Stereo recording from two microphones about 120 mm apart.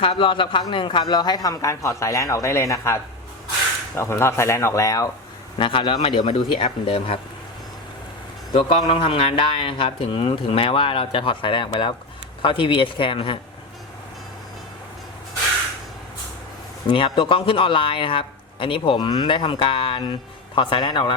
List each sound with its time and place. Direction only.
0.0 s a man's voice: 45° left (ahead or behind); by 5.1 s 25° left (ahead or behind)
5.5 s a man's voice: 45° left (ahead or behind)
8.9 s a man's voice: 50° left (ahead or behind)
16.8 s a man's voice: 45° left (ahead or behind)